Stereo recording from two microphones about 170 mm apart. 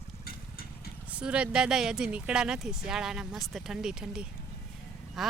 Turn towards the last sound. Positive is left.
turn(degrees=0)  # may be behind; listen again after turning